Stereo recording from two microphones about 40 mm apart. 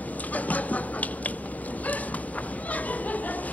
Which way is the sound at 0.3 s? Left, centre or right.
Left.